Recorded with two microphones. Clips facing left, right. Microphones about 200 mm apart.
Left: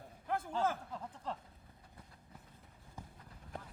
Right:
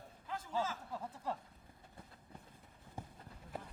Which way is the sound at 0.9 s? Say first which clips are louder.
Right 1 dB; 10° right (ahead or behind).